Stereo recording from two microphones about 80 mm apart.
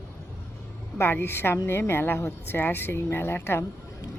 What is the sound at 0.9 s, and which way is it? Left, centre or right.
A woman's voice, left.